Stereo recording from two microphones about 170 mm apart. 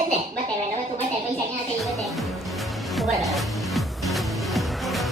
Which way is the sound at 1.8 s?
Centre (ahead or behind).